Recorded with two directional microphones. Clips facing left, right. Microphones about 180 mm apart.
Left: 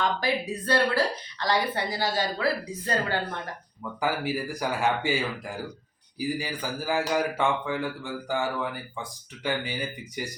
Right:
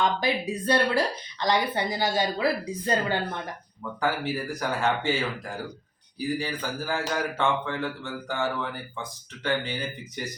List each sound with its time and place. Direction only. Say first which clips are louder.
0.0 s a woman's voice: right 1 dB; 15° right (ahead or behind)
4.0 s speech: even; 15° left (ahead or behind)
6.1 s speech: right 1 dB; 15° left (ahead or behind)